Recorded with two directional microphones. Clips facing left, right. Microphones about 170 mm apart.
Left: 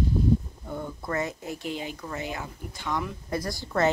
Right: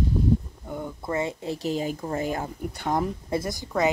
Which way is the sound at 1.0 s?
25° right (ahead or behind).